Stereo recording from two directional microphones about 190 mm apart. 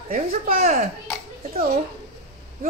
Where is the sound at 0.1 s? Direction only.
50° right (ahead or behind).